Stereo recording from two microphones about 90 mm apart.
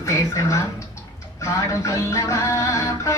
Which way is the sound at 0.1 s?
35° left (ahead or behind).